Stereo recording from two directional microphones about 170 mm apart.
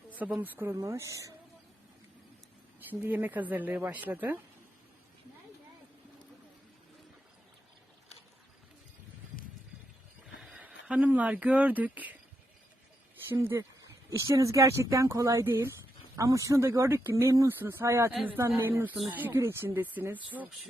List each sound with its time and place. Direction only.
0.1 s speech: 10° right (ahead or behind)
3.0 s speech: 10° right (ahead or behind)
10.4 s a sound: 5° right (ahead or behind)
10.8 s speech: 10° right (ahead or behind)
13.2 s speech: 15° right (ahead or behind)
18.1 s a woman's voice: centre (ahead or behind)
18.3 s speech: 15° right (ahead or behind)